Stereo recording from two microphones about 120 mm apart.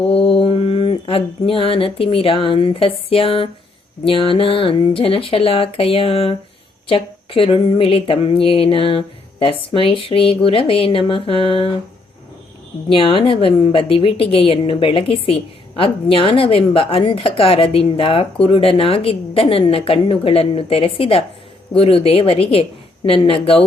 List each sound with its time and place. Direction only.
0.0 s a woman's voice: 55° left (ahead or behind)
12.9 s a woman's voice: 50° left (ahead or behind)